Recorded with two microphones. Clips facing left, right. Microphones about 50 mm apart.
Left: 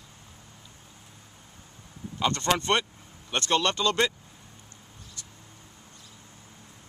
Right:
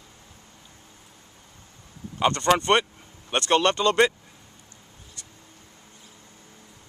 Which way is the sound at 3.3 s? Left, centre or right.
Right.